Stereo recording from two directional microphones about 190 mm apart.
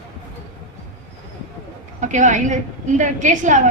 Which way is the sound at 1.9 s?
40° right (ahead or behind).